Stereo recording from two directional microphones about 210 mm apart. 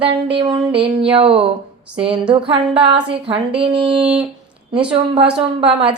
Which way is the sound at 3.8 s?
5° right (ahead or behind).